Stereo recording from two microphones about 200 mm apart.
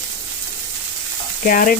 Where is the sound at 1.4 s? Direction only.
45° left (ahead or behind).